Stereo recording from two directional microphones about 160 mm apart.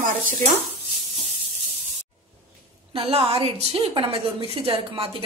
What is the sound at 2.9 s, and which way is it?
A woman's voice, 35° right (ahead or behind).